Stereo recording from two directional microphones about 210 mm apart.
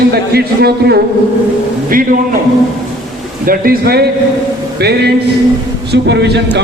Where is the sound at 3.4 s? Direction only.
45° right (ahead or behind).